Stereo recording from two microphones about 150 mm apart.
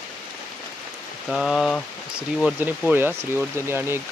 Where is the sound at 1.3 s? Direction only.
Centre (ahead or behind).